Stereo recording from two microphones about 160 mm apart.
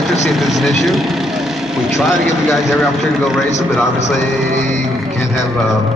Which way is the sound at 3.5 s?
45° left (ahead or behind).